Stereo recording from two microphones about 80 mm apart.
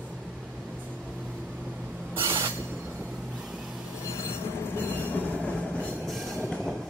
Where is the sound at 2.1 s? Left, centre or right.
Right.